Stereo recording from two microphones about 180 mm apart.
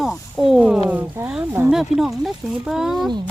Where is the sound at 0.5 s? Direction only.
5° right (ahead or behind).